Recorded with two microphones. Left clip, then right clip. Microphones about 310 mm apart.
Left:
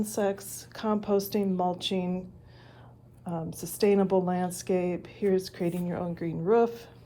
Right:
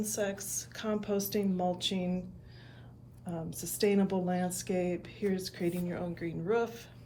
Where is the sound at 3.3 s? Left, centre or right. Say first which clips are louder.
Left 4 dB; centre.